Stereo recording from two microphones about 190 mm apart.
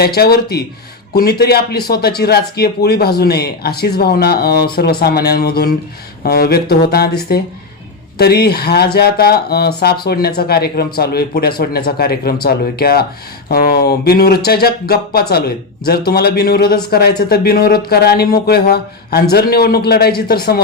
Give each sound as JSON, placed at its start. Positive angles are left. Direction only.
{"t": 0.0, "sound": "speech", "side_deg": 55}